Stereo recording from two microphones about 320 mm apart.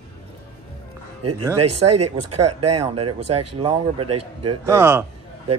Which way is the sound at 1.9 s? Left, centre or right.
Right.